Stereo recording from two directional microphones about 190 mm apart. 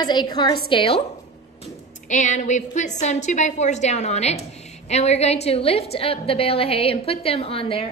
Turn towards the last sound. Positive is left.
turn(degrees=30)  # may be behind; listen again after turning